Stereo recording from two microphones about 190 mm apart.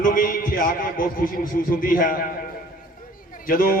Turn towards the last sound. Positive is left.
turn(degrees=50)  # may be behind; listen again after turning